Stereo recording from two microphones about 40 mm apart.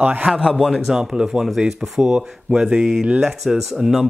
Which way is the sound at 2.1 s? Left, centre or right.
Right.